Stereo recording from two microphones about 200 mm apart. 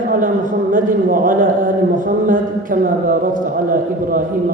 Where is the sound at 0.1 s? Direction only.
40° right (ahead or behind).